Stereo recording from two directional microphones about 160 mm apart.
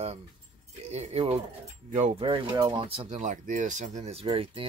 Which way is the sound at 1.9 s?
50° right (ahead or behind).